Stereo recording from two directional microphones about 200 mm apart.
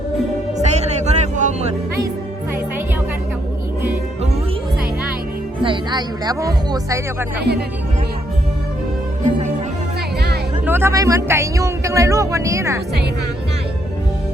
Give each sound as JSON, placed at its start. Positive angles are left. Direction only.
{"t": 0.6, "sound": "music", "side_deg": -35}
{"t": 5.6, "sound": "speech", "side_deg": -20}
{"t": 10.7, "sound": "speech", "side_deg": -10}